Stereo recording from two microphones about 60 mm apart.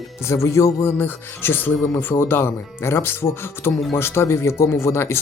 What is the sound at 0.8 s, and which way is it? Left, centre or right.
Speech, left.